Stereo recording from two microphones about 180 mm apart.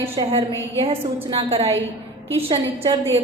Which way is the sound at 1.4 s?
35° right (ahead or behind).